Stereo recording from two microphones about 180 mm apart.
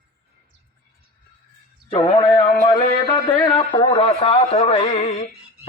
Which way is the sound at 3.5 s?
25° left (ahead or behind).